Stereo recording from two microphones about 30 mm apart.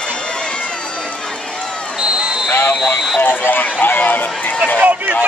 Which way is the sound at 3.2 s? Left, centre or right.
Left.